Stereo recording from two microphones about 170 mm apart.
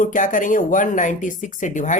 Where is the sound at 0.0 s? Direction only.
50° left (ahead or behind).